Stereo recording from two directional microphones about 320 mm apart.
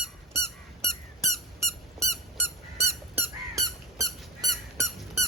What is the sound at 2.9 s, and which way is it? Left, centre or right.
Squeak, centre.